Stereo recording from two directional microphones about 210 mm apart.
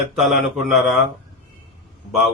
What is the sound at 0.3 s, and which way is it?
Speech, centre (ahead or behind).